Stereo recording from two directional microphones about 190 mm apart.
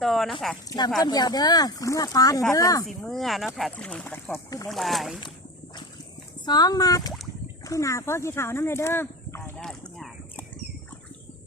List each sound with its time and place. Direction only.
0.0 s speech: centre (ahead or behind)
1.0 s speech: 20° left (ahead or behind)
2.8 s speech: centre (ahead or behind)
4.7 s speech: centre (ahead or behind)
6.4 s speech: 20° left (ahead or behind)
7.6 s a sound: 15° left (ahead or behind)